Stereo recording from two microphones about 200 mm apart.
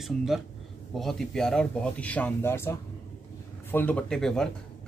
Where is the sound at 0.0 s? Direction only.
Centre (ahead or behind).